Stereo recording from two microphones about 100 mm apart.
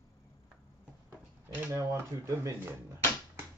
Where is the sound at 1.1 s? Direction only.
20° right (ahead or behind).